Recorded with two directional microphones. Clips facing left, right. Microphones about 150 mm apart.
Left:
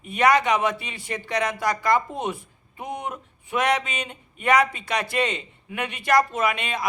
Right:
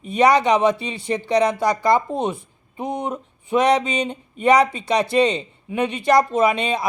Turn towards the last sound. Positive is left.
turn(degrees=-30)  # may be behind; listen again after turning